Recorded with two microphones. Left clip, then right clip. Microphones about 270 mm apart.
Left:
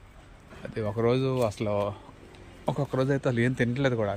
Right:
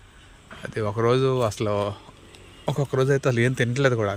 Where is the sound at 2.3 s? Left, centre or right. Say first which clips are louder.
Right 3 dB; centre.